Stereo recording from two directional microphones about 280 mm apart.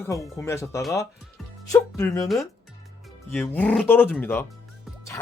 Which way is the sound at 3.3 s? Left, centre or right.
Centre.